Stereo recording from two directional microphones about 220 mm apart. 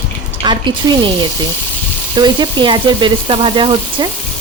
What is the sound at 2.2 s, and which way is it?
Speech, 20° right (ahead or behind).